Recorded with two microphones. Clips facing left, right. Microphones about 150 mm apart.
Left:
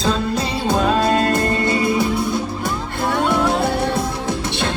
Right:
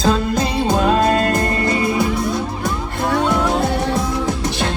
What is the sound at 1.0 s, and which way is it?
Music, 30° left (ahead or behind).